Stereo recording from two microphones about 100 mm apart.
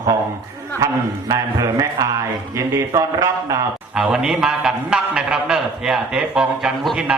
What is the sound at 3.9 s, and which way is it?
A man's voice, 5° right (ahead or behind).